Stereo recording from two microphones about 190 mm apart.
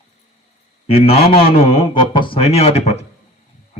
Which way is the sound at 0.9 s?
30° left (ahead or behind).